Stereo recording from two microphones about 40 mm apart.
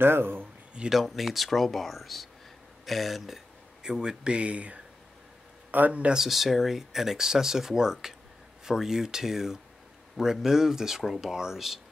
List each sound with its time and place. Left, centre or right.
0.0 s speech: right
1.0 s speech: centre; by 6.1 s right
6.1 s speech: centre